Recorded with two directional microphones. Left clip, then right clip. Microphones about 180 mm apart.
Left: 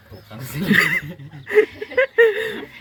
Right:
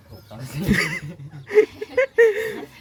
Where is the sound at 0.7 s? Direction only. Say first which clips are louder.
Left 6 dB; 15° right (ahead or behind).